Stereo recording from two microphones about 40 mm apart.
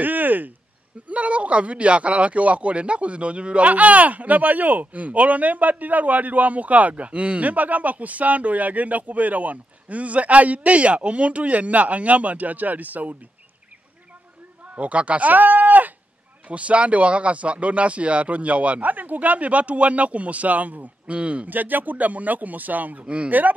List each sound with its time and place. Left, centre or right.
0.0 s a sound: right
1.0 s speech: right
14.8 s speech: right
16.4 s speech: right
21.5 s speech: right
23.0 s speech: right